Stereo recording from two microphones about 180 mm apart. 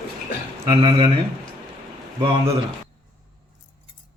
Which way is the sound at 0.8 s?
25° right (ahead or behind).